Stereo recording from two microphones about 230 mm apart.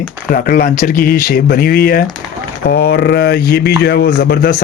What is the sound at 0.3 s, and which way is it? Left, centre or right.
Speech, left.